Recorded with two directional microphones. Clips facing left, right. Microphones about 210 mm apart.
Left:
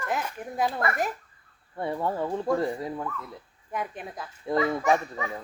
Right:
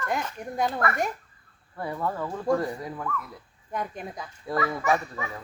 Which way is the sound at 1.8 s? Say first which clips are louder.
Left 2 dB; 30° left (ahead or behind).